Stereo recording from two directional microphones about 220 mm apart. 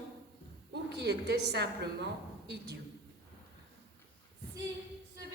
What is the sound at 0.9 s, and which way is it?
A man's voice, 50° right (ahead or behind).